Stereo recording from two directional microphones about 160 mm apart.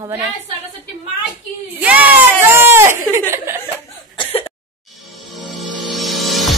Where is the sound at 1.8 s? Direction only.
10° right (ahead or behind).